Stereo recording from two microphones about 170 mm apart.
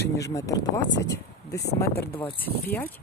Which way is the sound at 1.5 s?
75° left (ahead or behind).